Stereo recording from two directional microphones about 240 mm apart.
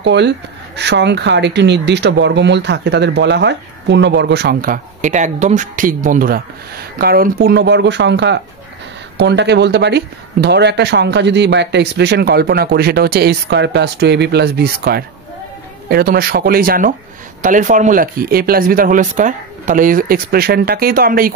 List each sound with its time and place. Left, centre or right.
0.0 s speech: right